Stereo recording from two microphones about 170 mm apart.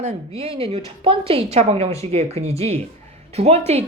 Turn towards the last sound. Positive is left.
turn(degrees=-40)  # may be behind; listen again after turning